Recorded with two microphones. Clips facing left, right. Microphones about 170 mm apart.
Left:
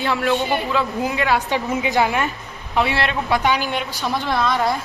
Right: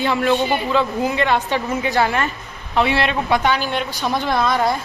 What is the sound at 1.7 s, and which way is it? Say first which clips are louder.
Speech: even; 15° left (ahead or behind).